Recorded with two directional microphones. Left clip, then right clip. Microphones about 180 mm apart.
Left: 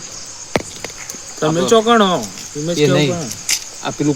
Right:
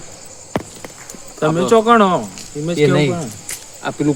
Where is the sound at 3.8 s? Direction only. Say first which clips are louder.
Right 3 dB; 10° left (ahead or behind).